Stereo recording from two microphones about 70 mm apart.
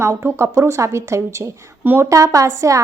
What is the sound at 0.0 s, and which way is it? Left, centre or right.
Speech, right.